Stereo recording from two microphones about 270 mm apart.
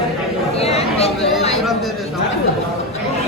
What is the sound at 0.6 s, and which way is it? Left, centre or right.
Speech, left.